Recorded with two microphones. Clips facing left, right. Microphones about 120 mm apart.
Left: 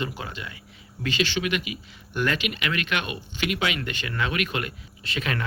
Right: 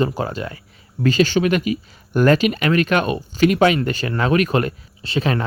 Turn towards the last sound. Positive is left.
turn(degrees=-30)  # may be behind; listen again after turning